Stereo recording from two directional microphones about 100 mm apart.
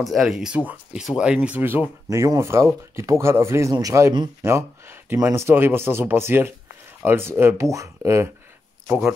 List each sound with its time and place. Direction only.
0.0 s speech: centre (ahead or behind); by 1.9 s 15° right (ahead or behind)
2.0 s speech: 30° right (ahead or behind)
8.8 s speech: 15° right (ahead or behind)